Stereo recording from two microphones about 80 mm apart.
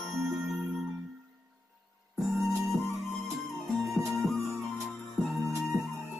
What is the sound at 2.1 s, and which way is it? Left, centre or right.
Music, centre.